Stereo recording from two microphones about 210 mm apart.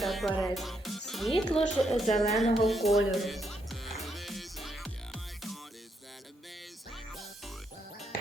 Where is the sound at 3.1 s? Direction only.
Centre (ahead or behind).